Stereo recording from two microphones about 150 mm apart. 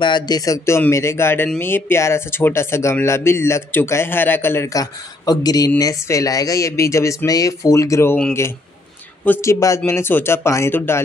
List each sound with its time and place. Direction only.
0.0 s speech: 30° left (ahead or behind)